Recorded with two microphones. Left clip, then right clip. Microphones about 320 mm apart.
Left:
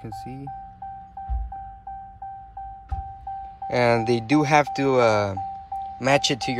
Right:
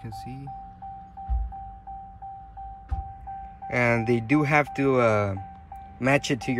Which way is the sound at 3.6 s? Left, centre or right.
Centre.